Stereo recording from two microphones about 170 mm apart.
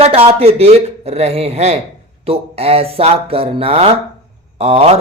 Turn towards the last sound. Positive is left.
turn(degrees=-35)  # may be behind; listen again after turning